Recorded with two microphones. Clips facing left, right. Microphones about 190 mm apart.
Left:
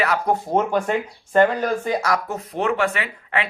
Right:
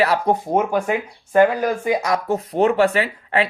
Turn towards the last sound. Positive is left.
turn(degrees=-35)  # may be behind; listen again after turning